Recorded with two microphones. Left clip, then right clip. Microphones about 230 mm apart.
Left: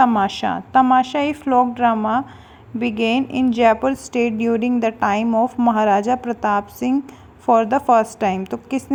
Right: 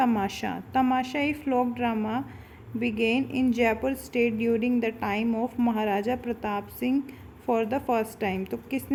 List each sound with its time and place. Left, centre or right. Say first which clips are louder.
0.0 s a woman's voice: left 10 dB; centre